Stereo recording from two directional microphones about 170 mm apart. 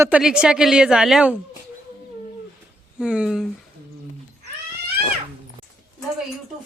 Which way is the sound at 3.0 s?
5° right (ahead or behind).